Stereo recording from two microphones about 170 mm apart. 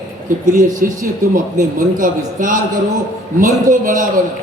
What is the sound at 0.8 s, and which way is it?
A man's voice, 55° right (ahead or behind).